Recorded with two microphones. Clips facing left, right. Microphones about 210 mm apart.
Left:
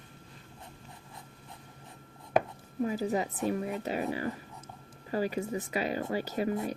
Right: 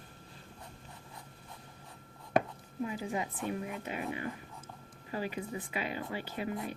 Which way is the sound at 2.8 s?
40° left (ahead or behind).